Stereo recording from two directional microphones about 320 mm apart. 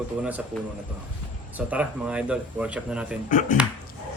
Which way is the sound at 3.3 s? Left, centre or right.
Left.